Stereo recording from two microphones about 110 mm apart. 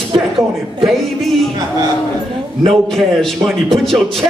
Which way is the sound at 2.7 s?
Centre (ahead or behind).